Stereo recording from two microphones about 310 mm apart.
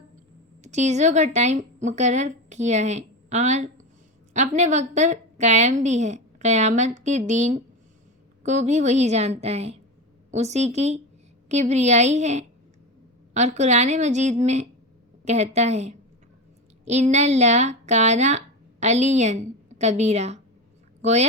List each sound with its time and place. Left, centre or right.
0.6 s a woman's voice: right